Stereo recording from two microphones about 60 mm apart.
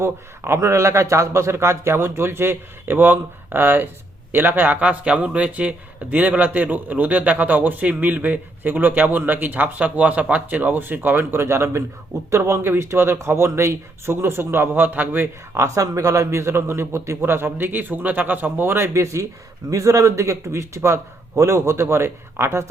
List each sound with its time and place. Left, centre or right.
0.0 s a man's voice: right
15.6 s a man's voice: right
18.9 s a man's voice: right